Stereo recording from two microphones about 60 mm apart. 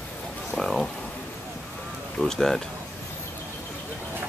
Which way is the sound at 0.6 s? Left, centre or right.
Centre.